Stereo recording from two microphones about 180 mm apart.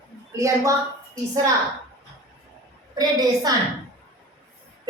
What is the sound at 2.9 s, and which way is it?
Speech, 20° right (ahead or behind).